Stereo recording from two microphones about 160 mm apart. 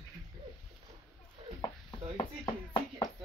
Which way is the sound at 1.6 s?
25° left (ahead or behind).